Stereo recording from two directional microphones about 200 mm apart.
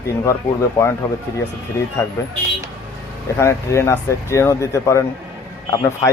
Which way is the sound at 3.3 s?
15° left (ahead or behind).